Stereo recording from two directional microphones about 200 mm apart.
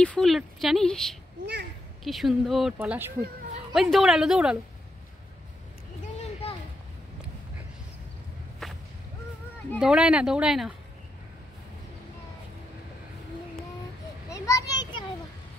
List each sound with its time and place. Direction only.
0.0 s speech: 5° left (ahead or behind)
1.4 s a sound: 60° right (ahead or behind)
2.0 s speech: centre (ahead or behind)
8.6 s whip: centre (ahead or behind)
9.8 s speech: 5° right (ahead or behind)
14.3 s children playing: 15° left (ahead or behind)